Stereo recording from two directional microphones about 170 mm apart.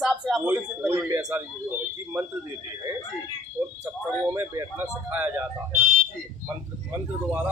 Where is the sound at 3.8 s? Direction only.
15° right (ahead or behind).